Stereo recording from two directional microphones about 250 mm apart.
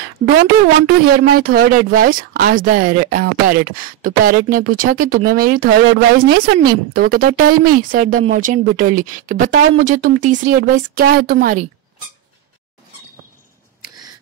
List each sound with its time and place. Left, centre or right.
0.8 s speech: right